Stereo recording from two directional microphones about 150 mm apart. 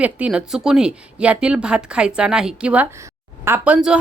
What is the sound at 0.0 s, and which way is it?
A woman's voice, 10° right (ahead or behind).